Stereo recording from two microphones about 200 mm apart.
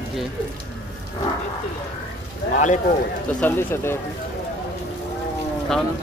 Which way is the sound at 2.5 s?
40° left (ahead or behind).